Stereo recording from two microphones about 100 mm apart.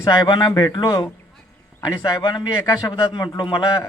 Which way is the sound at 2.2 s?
45° left (ahead or behind).